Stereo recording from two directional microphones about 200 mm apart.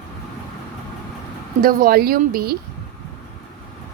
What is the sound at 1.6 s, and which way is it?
A woman's voice, 45° right (ahead or behind).